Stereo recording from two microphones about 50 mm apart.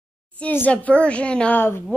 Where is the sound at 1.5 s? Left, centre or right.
Left.